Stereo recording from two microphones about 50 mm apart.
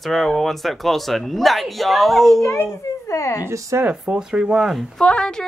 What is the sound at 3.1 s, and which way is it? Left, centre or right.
Speech, left.